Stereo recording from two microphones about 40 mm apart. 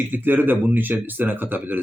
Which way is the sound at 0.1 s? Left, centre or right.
Right.